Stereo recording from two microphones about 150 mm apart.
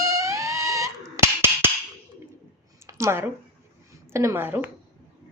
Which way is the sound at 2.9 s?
20° right (ahead or behind).